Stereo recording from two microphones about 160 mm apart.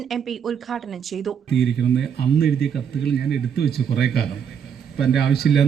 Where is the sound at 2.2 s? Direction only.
80° left.